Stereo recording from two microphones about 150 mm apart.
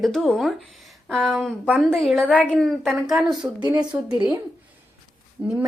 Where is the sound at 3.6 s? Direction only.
25° right (ahead or behind).